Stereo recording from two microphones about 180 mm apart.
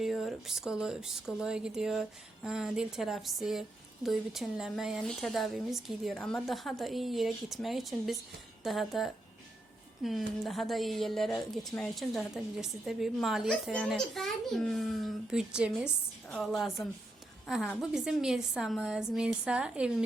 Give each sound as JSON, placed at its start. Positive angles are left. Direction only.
{"t": 0.0, "sound": "a woman's voice", "side_deg": 0}